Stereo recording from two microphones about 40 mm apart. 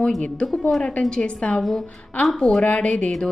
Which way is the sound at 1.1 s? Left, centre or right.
Left.